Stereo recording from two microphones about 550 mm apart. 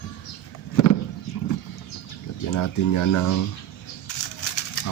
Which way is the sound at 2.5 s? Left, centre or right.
Left.